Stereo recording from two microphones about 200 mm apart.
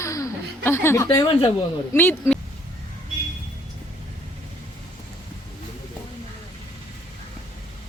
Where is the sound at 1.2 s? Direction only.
30° left (ahead or behind).